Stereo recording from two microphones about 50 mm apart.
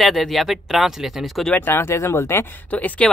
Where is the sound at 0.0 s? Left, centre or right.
Centre.